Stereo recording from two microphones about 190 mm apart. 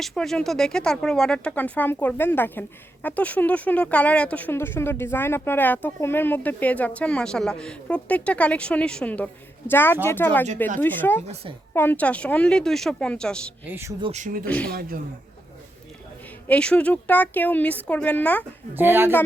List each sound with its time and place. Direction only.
0.0 s a woman's voice: centre (ahead or behind)
13.7 s speech: 10° right (ahead or behind)
14.0 s speech: 35° right (ahead or behind)
14.4 s speech: 5° left (ahead or behind)
14.7 s a woman's voice: 50° right (ahead or behind)
16.5 s speech: 5° left (ahead or behind)
18.7 s speech: 10° right (ahead or behind)